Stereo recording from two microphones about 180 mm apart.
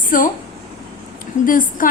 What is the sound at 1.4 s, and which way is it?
Speech, 50° left (ahead or behind).